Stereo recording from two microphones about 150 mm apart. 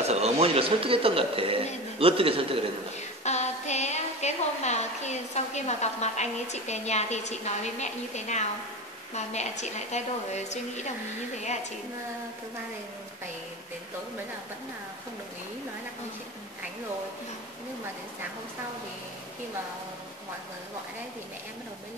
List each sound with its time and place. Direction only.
0.0 s speech: 45° right (ahead or behind)
3.3 s a woman's voice: 50° left (ahead or behind)